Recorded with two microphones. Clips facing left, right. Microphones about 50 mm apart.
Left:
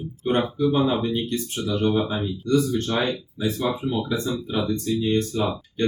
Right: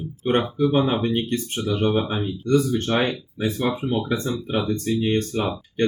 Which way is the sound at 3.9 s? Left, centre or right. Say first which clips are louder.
Right 1 dB; right.